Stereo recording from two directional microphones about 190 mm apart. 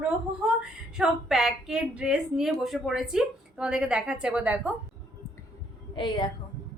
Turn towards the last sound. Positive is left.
turn(degrees=25)  # may be behind; listen again after turning